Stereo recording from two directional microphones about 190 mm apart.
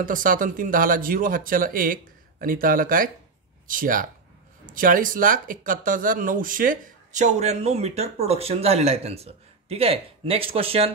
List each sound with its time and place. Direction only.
0.0 s speech: 45° right (ahead or behind)